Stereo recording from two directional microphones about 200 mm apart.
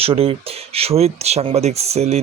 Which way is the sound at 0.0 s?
30° right (ahead or behind).